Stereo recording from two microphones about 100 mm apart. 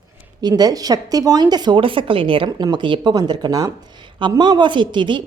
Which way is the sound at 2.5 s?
45° right (ahead or behind).